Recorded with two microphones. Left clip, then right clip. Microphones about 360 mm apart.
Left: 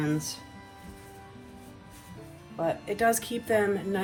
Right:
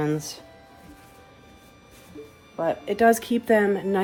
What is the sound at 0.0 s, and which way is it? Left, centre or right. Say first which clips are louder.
Speech: right 4 dB; right.